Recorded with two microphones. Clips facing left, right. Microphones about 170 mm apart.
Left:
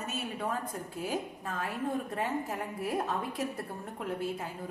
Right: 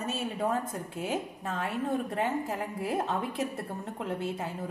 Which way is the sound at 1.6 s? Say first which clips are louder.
Right 3 dB; 25° right (ahead or behind).